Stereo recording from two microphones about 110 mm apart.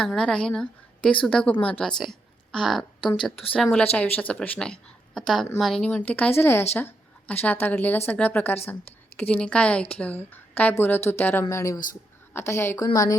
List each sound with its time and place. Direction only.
0.0 s a woman's voice: 5° left (ahead or behind); by 13.1 s 30° left (ahead or behind)